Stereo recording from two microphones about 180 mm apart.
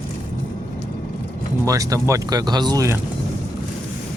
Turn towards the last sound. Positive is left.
turn(degrees=-20)  # may be behind; listen again after turning